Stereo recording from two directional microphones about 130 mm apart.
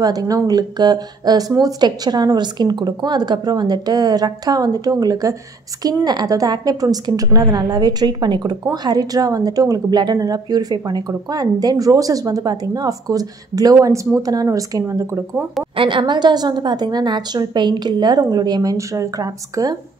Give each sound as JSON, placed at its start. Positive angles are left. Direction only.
{"t": 0.0, "sound": "a woman's voice", "side_deg": -30}
{"t": 15.7, "sound": "a woman's voice", "side_deg": -40}